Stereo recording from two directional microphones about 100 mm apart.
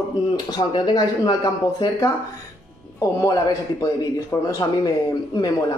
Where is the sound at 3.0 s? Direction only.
35° left (ahead or behind).